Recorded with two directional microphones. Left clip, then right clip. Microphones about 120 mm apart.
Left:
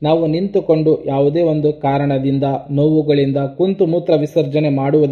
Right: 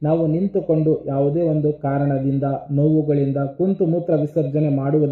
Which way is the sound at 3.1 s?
30° left (ahead or behind).